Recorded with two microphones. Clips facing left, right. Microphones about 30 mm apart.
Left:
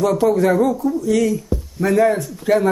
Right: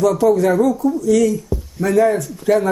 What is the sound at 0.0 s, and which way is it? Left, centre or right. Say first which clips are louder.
Speech: right 2 dB; left.